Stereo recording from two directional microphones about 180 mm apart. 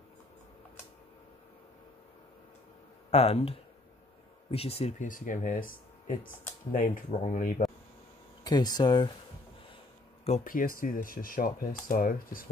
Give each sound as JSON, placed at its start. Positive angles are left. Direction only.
{"t": 3.1, "sound": "speech", "side_deg": 35}
{"t": 8.5, "sound": "speech", "side_deg": 20}
{"t": 10.2, "sound": "speech", "side_deg": 45}